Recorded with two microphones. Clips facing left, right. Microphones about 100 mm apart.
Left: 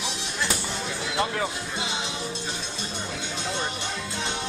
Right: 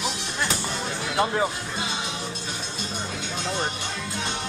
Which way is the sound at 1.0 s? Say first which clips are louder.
Right 4 dB; 25° right (ahead or behind).